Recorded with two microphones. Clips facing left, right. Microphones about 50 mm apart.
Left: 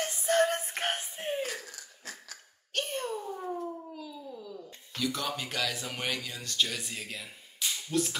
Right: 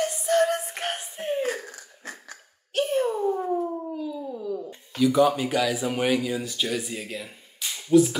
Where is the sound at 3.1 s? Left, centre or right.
Right.